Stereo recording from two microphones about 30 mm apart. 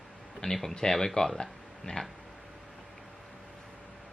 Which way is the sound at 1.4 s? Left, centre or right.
Left.